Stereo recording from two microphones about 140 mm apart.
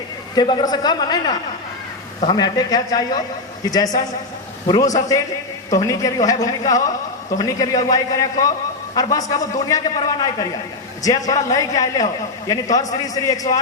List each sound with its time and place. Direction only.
0.3 s a man's voice: 30° left (ahead or behind)